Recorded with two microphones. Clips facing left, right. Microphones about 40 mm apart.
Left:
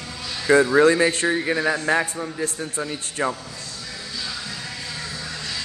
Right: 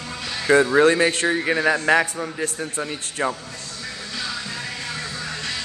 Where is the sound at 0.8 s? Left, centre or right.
Right.